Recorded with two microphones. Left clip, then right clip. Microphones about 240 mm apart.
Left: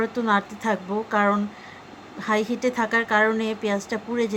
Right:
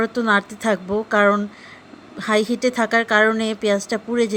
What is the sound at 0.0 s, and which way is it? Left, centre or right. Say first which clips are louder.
A woman's voice: right 4 dB; centre.